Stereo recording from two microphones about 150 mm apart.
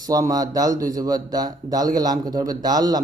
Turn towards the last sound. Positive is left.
turn(degrees=-25)  # may be behind; listen again after turning